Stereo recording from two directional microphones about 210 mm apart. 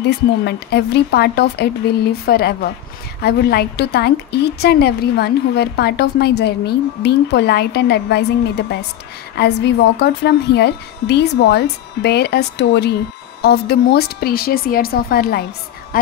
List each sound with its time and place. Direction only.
0.0 s a woman's voice: 55° left (ahead or behind)